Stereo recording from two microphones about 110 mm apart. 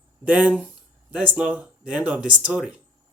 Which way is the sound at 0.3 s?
15° right (ahead or behind).